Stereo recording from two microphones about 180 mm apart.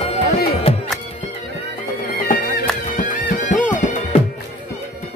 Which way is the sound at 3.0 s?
45° left (ahead or behind).